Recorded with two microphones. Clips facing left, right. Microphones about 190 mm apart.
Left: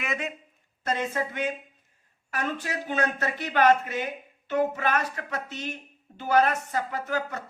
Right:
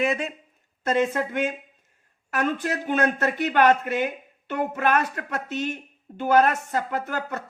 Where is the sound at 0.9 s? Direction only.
55° right (ahead or behind).